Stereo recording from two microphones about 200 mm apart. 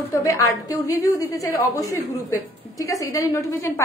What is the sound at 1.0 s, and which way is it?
A woman's voice, 15° left (ahead or behind).